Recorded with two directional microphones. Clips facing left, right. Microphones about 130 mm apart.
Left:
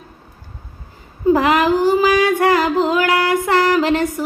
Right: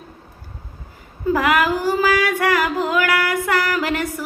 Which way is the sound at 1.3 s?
25° left (ahead or behind).